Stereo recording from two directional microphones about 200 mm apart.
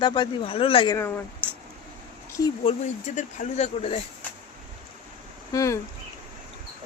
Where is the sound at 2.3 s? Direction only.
25° left (ahead or behind).